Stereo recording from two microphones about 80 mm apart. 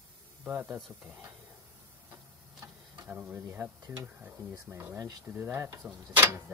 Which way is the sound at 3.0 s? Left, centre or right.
Centre.